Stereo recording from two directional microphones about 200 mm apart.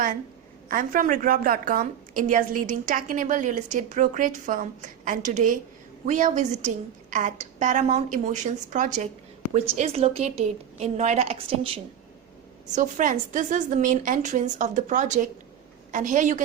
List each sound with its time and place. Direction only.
0.7 s a woman's voice: 45° right (ahead or behind); by 11.8 s 25° right (ahead or behind)
12.7 s a woman's voice: 40° right (ahead or behind)